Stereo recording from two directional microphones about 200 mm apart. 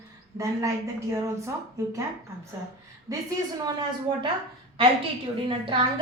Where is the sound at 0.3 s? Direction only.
15° right (ahead or behind).